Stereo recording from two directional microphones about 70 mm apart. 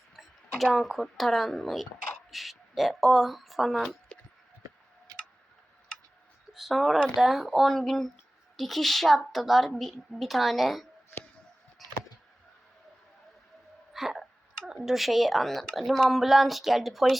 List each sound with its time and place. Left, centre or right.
0.2 s speech: centre
5.1 s tick-tock: right
6.5 s speech: centre
11.8 s a sound: centre
13.9 s hiccup: centre
14.6 s speech: centre